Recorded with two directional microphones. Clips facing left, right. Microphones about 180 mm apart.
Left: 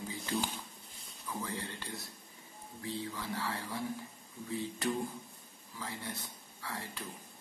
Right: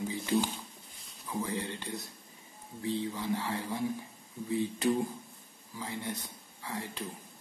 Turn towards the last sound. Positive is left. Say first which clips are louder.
# right 4 dB
turn(degrees=-20)  # may be behind; listen again after turning